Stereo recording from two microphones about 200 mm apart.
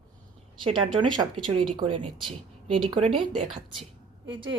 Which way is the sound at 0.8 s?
25° right (ahead or behind).